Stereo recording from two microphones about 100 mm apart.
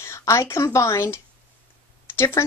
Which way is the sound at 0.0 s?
30° left (ahead or behind).